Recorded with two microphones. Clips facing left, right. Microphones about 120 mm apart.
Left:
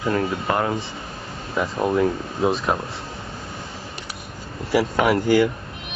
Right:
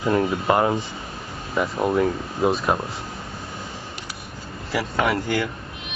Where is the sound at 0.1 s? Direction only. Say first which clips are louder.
Right 3 dB; 15° right (ahead or behind).